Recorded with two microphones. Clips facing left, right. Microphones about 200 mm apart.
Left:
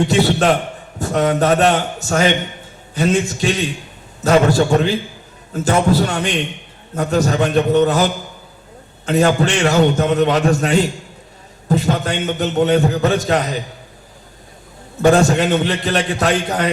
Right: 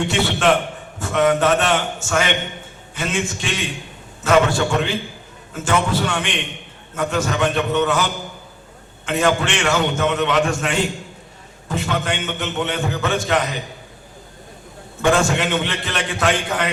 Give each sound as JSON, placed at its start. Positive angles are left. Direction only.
{"t": 0.1, "sound": "a man's voice", "side_deg": 40}
{"t": 15.0, "sound": "a man's voice", "side_deg": 40}